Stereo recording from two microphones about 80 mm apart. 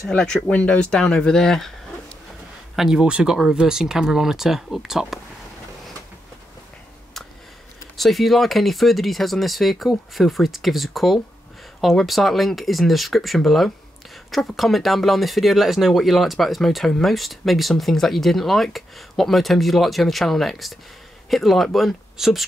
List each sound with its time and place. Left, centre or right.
0.1 s speech: centre
2.7 s speech: centre
8.0 s speech: centre